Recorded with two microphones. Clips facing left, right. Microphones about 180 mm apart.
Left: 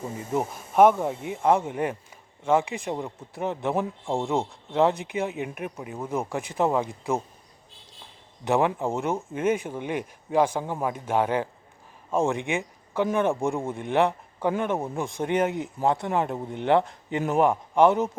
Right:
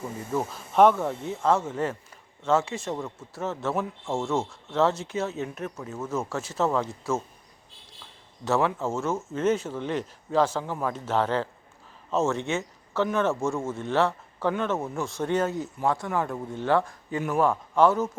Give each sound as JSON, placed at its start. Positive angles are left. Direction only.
{"t": 0.3, "sound": "a man's voice", "side_deg": 15}
{"t": 8.4, "sound": "a man's voice", "side_deg": 15}